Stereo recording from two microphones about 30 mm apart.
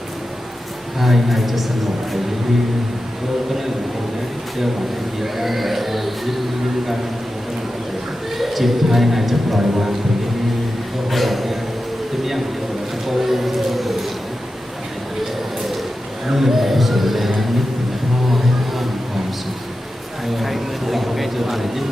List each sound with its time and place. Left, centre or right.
0.9 s speech: centre
5.2 s speech: centre
8.4 s speech: centre
11.1 s a sound: centre
13.1 s speech: centre
16.3 s speech: centre
20.3 s speech: centre